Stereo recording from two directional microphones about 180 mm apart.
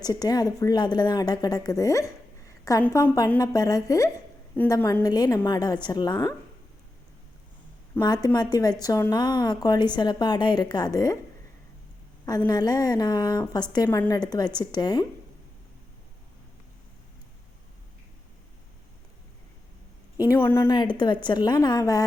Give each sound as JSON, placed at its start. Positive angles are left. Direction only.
{"t": 0.0, "sound": "a woman's voice", "side_deg": 20}
{"t": 8.0, "sound": "a woman's voice", "side_deg": 25}
{"t": 12.5, "sound": "a woman's voice", "side_deg": 20}
{"t": 20.3, "sound": "speech", "side_deg": 15}
{"t": 20.7, "sound": "a woman's voice", "side_deg": 25}